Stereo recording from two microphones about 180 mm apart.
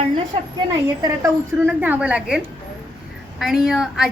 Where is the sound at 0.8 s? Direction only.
20° right (ahead or behind).